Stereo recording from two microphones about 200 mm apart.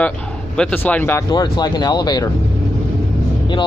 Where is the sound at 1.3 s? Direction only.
20° left (ahead or behind).